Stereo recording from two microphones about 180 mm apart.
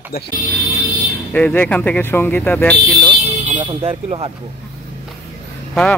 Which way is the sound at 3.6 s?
30° right (ahead or behind).